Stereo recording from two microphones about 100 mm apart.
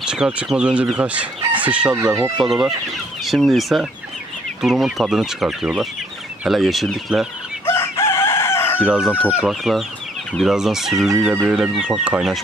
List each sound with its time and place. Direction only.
0.0 s chicken: 10° right (ahead or behind)
2.4 s speech: 5° right (ahead or behind)
7.6 s chicken: 25° left (ahead or behind)
8.8 s speech: 10° right (ahead or behind)
11.4 s chicken: 5° right (ahead or behind)